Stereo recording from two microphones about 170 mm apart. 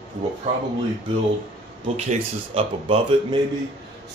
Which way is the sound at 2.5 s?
30° right (ahead or behind).